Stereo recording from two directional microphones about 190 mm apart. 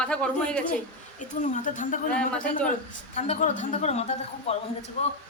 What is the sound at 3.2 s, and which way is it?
A woman's voice, 40° left (ahead or behind).